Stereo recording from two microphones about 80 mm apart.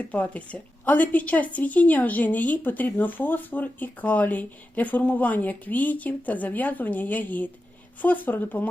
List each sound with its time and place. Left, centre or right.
0.0 s a woman's voice: centre